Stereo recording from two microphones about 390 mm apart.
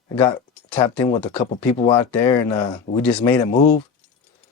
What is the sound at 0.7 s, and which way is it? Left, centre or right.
Speech, centre.